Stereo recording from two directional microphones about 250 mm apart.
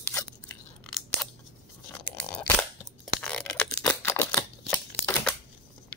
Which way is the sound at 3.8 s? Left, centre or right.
Centre.